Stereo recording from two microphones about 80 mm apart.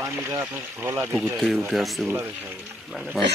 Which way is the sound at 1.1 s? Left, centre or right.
Centre.